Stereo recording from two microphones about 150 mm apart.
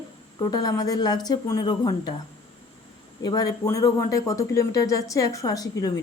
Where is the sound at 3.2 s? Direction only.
25° left (ahead or behind).